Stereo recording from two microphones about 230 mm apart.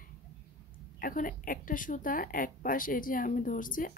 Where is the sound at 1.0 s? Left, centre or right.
Left.